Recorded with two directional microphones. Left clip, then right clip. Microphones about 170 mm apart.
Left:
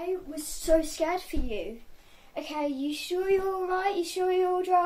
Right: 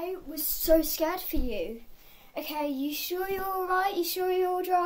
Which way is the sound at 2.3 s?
30° right (ahead or behind).